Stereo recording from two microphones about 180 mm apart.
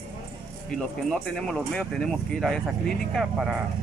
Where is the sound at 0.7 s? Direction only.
5° left (ahead or behind).